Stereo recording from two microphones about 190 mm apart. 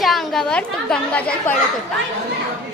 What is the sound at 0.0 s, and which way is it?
Speech, centre (ahead or behind).